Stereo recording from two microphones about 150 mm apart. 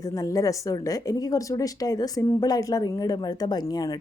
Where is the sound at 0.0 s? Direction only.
25° left (ahead or behind).